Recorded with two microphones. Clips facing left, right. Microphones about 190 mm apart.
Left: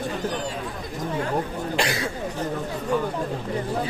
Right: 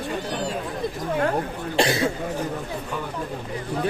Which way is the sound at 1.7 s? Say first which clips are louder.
Right 5 dB; 25° right (ahead or behind).